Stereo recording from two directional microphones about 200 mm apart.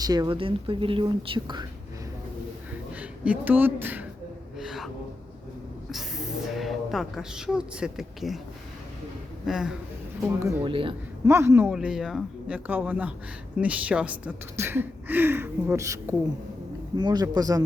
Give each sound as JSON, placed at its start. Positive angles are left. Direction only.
{"t": 0.0, "sound": "speech", "side_deg": -20}
{"t": 2.9, "sound": "speech", "side_deg": -10}
{"t": 4.5, "sound": "gasp", "side_deg": 0}
{"t": 6.6, "sound": "speech", "side_deg": 0}
{"t": 9.5, "sound": "speech", "side_deg": 0}
{"t": 10.2, "sound": "a woman's voice", "side_deg": -10}
{"t": 10.6, "sound": "speech", "side_deg": -25}
{"t": 11.3, "sound": "a woman's voice", "side_deg": -15}